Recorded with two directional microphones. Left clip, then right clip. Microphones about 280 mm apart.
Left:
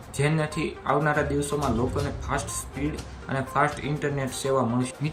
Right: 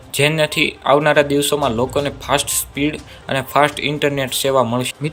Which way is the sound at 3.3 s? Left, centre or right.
Centre.